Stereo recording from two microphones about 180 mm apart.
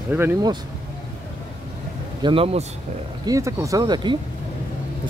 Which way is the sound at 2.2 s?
30° right (ahead or behind).